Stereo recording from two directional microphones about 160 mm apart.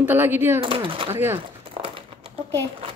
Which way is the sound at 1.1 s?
15° right (ahead or behind).